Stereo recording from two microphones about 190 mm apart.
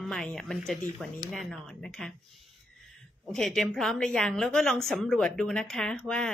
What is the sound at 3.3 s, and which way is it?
A woman's voice, centre (ahead or behind).